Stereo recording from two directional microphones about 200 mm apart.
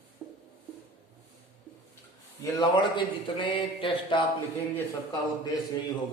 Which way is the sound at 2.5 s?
25° left (ahead or behind).